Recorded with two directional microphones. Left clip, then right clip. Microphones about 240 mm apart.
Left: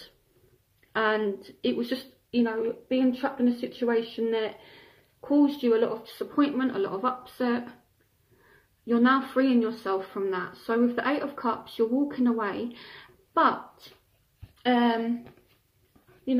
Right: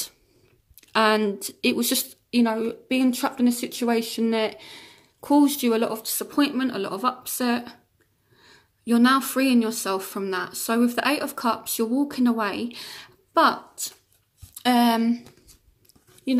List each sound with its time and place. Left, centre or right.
0.9 s a woman's voice: right
8.8 s speech: right
14.6 s a woman's voice: right